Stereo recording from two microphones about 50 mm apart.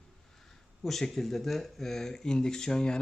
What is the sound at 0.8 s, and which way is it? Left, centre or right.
Speech, centre.